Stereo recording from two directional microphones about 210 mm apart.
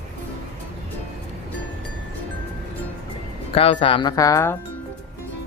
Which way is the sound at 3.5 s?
25° left (ahead or behind).